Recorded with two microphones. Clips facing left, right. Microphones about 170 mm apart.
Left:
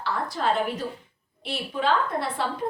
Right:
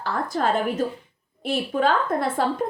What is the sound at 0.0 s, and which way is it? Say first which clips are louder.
A woman's voice: right 3 dB; 45° right (ahead or behind).